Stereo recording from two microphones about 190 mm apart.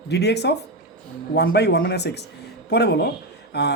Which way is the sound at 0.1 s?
60° left (ahead or behind).